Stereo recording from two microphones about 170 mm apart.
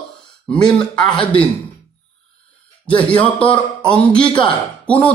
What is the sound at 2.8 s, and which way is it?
Speech, 30° left (ahead or behind).